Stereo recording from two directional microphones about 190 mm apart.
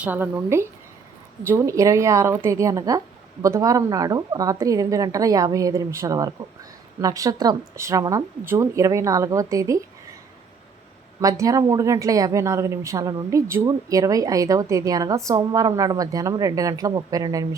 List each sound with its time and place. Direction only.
0.0 s a woman's voice: 10° right (ahead or behind)
11.2 s a woman's voice: 15° right (ahead or behind)